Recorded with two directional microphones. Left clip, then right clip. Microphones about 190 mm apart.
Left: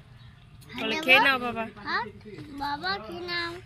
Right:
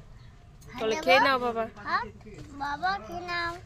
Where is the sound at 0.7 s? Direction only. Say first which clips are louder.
Left 2 dB; 25° right (ahead or behind).